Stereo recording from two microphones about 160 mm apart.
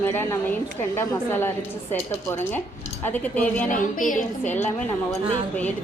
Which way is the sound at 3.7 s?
55° left (ahead or behind).